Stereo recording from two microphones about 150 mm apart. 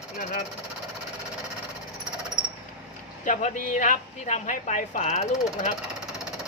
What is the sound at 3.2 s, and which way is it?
Speech, 55° left (ahead or behind).